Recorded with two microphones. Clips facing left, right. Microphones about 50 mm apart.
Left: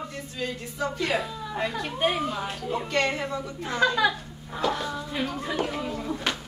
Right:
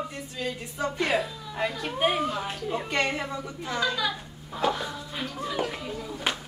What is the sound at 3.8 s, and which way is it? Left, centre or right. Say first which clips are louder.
Speech: left 6 dB; left.